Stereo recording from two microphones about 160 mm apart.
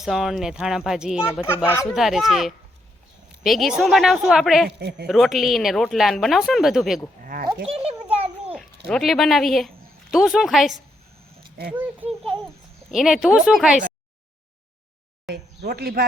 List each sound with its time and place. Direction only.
0.0 s speech: centre (ahead or behind)
1.4 s speech: 15° left (ahead or behind)
1.9 s speech: centre (ahead or behind)
4.8 s speech: 90° right
5.0 s speech: centre (ahead or behind)
7.3 s speech: 65° right (ahead or behind)
8.5 s a child's voice: centre (ahead or behind)
15.3 s speech: 85° right